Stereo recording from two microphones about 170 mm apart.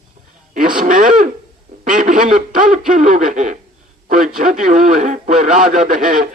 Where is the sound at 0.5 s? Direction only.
55° right (ahead or behind).